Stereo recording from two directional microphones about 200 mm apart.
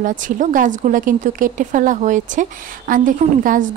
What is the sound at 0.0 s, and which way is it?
A woman's voice, 40° right (ahead or behind).